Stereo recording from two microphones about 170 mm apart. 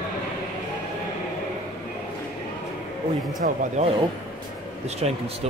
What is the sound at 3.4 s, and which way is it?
A man's voice, 55° right (ahead or behind).